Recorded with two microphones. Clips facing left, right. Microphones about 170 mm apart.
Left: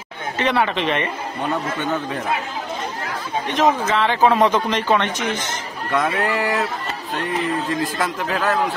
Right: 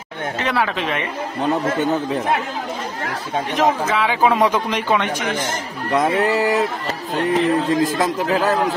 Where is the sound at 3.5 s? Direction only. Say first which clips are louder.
Left 1 dB; 10° right (ahead or behind).